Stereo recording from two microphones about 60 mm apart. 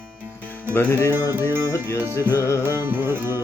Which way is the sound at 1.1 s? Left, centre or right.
Right.